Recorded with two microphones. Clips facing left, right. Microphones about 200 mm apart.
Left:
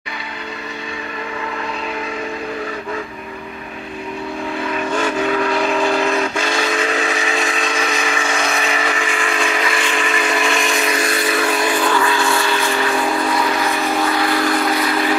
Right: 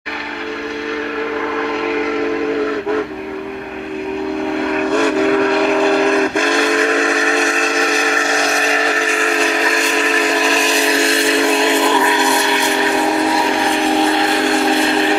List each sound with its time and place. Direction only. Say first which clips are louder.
4.6 s steam whistle: right 5 dB; 65° right (ahead or behind)
5.5 s vehicle: right 4 dB; 60° right (ahead or behind)
6.3 s train: right 5 dB; 55° right (ahead or behind); by 15.1 s 25° right (ahead or behind)